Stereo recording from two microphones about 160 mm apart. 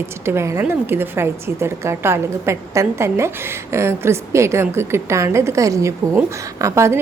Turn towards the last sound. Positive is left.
turn(degrees=-15)  # may be behind; listen again after turning